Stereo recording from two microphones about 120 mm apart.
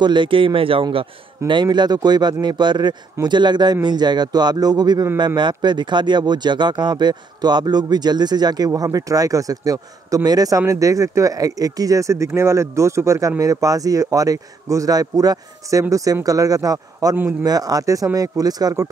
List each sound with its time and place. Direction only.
0.0 s a man's voice: 40° right (ahead or behind)